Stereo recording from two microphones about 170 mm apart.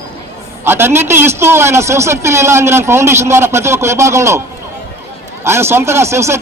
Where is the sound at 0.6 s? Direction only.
15° right (ahead or behind).